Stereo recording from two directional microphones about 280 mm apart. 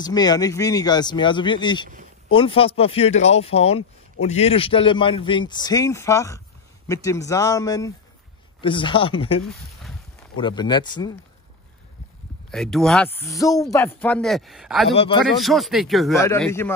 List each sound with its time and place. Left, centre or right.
0.0 s speech: centre
12.4 s speech: centre
14.9 s speech: left
15.3 s speech: centre